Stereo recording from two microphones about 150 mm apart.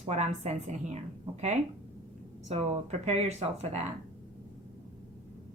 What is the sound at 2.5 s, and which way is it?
A woman's voice, 45° right (ahead or behind).